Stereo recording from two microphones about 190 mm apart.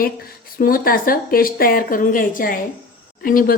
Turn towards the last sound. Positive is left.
turn(degrees=50)  # may be behind; listen again after turning